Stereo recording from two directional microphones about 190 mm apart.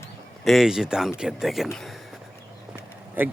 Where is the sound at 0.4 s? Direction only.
Centre (ahead or behind).